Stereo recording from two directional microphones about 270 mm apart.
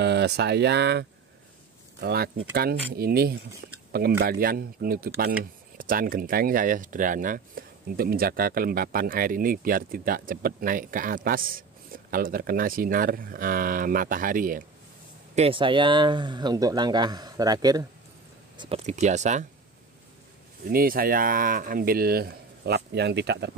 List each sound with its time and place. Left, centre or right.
0.0 s speech: right
15.3 s speech: right
20.6 s speech: right